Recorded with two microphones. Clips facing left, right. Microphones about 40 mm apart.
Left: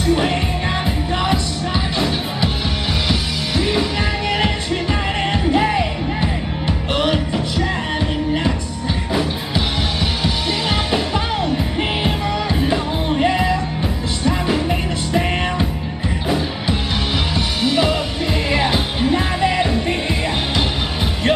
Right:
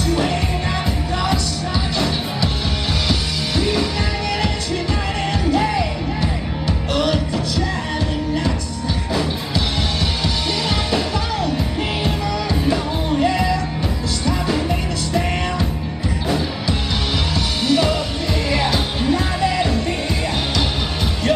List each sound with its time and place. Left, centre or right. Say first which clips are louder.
0.0 s music: left 2 dB; left
3.1 s music: left 1 dB; centre
5.4 s music: left 1 dB; left
9.1 s music: left 1 dB; centre
11.4 s music: left 2 dB; left